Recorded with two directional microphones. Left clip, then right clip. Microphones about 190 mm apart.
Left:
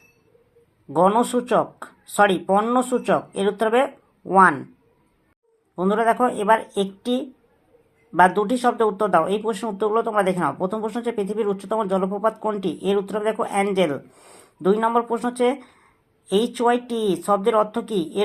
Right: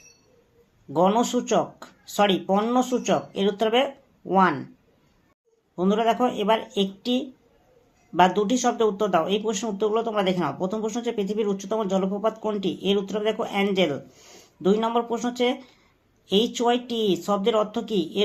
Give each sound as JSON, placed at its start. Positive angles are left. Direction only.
{"t": 0.9, "sound": "speech", "side_deg": 15}
{"t": 5.7, "sound": "speech", "side_deg": 15}
{"t": 8.4, "sound": "speech", "side_deg": 15}